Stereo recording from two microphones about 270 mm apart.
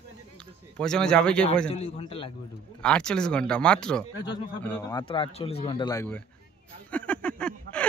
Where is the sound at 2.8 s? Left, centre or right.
Centre.